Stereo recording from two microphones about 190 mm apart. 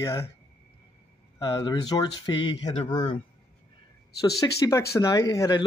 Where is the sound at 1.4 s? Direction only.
20° left (ahead or behind).